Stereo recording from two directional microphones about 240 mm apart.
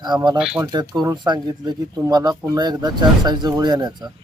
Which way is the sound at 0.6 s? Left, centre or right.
Centre.